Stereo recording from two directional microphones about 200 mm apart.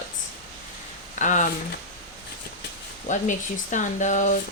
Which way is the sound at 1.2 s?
40° left (ahead or behind).